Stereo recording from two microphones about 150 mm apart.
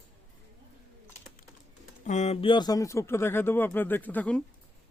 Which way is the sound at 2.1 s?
50° left (ahead or behind).